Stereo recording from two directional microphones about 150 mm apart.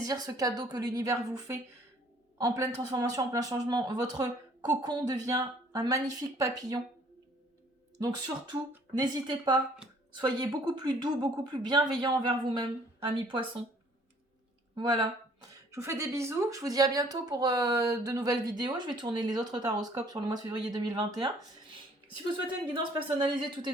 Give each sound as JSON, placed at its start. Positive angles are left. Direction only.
{"t": 0.0, "sound": "speech", "side_deg": -25}
{"t": 9.0, "sound": "speech", "side_deg": -30}
{"t": 14.8, "sound": "speech", "side_deg": -25}
{"t": 22.7, "sound": "a woman's voice", "side_deg": -35}